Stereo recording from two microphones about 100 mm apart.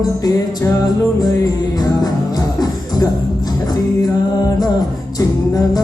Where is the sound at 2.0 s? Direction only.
40° left (ahead or behind).